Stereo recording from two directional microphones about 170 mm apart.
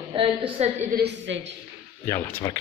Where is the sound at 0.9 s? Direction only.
75° right (ahead or behind).